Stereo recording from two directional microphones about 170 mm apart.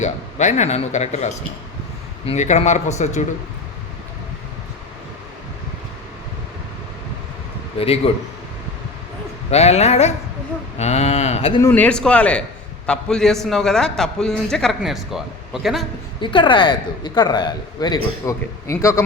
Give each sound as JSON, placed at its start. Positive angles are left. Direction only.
{"t": 0.0, "sound": "speech", "side_deg": 45}
{"t": 7.8, "sound": "speech", "side_deg": 35}
{"t": 9.5, "sound": "speech", "side_deg": 40}
{"t": 11.6, "sound": "a man's voice", "side_deg": 10}
{"t": 16.2, "sound": "speech", "side_deg": 30}